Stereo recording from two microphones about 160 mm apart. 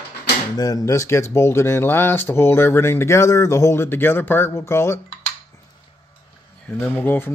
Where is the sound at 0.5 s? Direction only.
25° left (ahead or behind).